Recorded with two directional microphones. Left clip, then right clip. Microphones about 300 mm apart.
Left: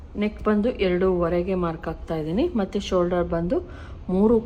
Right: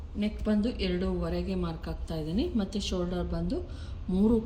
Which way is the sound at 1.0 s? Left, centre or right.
Centre.